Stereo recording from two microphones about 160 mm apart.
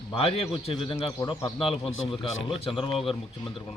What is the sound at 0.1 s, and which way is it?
A man's voice, 35° left (ahead or behind).